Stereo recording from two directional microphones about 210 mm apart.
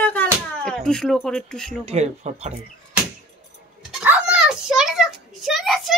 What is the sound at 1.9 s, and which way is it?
Speech, 30° right (ahead or behind).